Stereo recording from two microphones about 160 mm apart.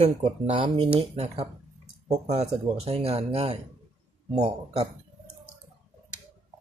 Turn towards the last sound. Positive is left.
turn(degrees=-45)  # may be behind; listen again after turning